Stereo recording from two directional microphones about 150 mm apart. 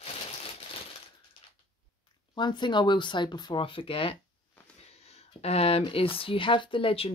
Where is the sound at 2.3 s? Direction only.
30° left (ahead or behind).